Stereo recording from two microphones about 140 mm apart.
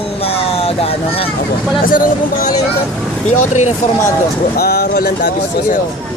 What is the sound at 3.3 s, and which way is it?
Speech, 60° left (ahead or behind).